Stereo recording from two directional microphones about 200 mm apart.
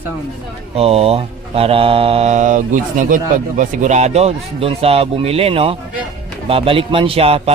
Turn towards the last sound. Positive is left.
turn(degrees=-30)  # may be behind; listen again after turning